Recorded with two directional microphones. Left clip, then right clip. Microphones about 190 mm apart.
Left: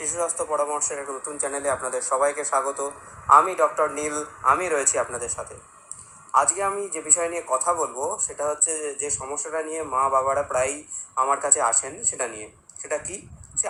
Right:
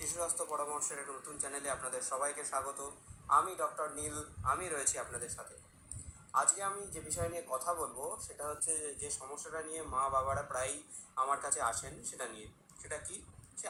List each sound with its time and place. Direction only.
0.0 s a man's voice: 50° left (ahead or behind)